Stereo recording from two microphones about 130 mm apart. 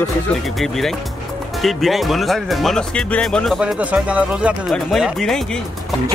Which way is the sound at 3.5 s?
10° right (ahead or behind).